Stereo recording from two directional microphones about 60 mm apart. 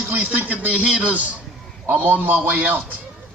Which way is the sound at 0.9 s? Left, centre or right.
Centre.